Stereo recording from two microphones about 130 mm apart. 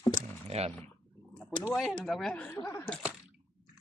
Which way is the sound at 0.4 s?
55° right (ahead or behind).